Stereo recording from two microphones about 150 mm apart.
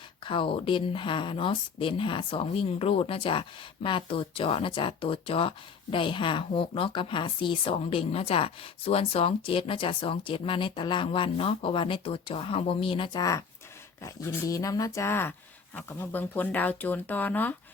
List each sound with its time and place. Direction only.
0.3 s speech: 35° left (ahead or behind)
14.0 s speech: 20° left (ahead or behind)